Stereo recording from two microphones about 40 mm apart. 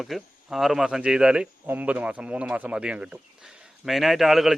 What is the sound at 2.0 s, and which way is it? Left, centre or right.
Speech, right.